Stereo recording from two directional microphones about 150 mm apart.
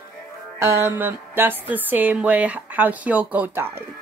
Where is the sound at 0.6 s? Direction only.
15° right (ahead or behind).